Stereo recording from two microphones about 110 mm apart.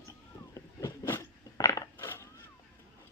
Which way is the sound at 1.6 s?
30° left (ahead or behind).